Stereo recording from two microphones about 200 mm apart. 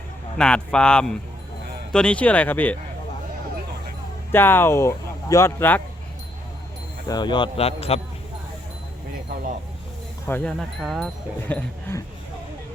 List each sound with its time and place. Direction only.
0.3 s speech: 5° left (ahead or behind)
4.3 s speech: 10° left (ahead or behind)
7.1 s a man's voice: 20° left (ahead or behind)
10.2 s speech: 5° left (ahead or behind)